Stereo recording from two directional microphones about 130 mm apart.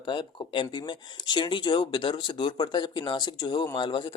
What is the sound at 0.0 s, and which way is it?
Speech, 40° left (ahead or behind).